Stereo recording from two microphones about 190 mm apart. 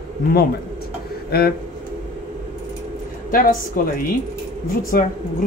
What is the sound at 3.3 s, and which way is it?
Speech, 45° left (ahead or behind).